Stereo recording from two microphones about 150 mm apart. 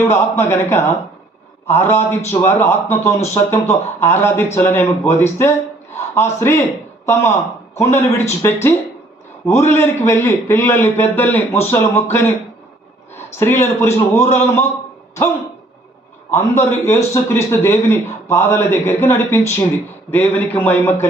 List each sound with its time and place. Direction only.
0.1 s speech: 15° left (ahead or behind)
16.3 s speech: 15° left (ahead or behind)